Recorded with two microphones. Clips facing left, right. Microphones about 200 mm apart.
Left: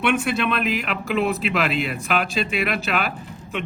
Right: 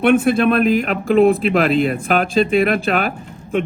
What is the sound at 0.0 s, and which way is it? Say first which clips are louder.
A man's voice: right 8 dB; 50° right (ahead or behind).